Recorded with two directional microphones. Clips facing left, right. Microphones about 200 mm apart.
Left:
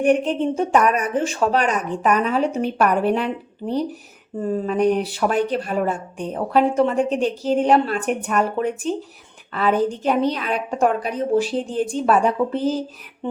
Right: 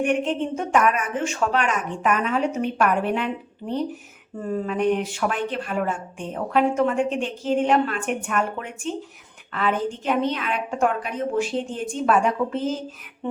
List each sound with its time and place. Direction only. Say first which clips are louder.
0.0 s a woman's voice: left 5 dB; 35° left (ahead or behind)
4.5 s a woman's voice: left 3 dB; 35° left (ahead or behind)